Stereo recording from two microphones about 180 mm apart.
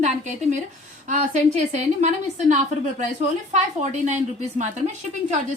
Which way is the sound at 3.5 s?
40° right (ahead or behind).